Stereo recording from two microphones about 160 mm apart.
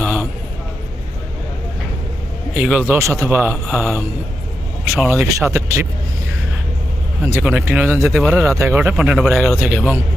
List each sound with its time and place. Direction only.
0.0 s a sound: 5° right (ahead or behind)
2.6 s speech: 10° right (ahead or behind)
4.9 s speech: 10° right (ahead or behind)
7.3 s speech: 10° right (ahead or behind)
8.4 s speech: 20° right (ahead or behind)